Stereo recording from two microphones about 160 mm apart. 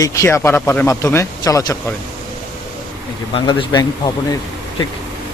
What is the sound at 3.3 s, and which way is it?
A man's voice, 30° left (ahead or behind).